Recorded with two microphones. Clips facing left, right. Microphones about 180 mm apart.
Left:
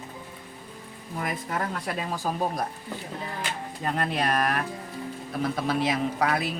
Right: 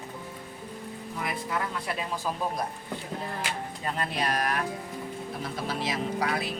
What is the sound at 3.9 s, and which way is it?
Speech, 55° left (ahead or behind).